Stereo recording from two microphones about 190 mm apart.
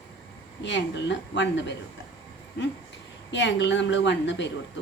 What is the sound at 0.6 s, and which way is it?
Speech, 70° left (ahead or behind).